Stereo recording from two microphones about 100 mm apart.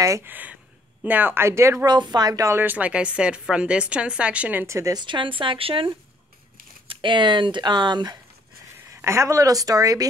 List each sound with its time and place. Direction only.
0.2 s a woman's voice: 15° right (ahead or behind)
1.9 s a woman's voice: 45° right (ahead or behind)
2.6 s a woman's voice: 15° right (ahead or behind)
4.6 s speech: 30° right (ahead or behind)
4.9 s a woman's voice: 50° right (ahead or behind)
6.9 s speech: 55° right (ahead or behind)
8.9 s a woman's voice: 30° right (ahead or behind)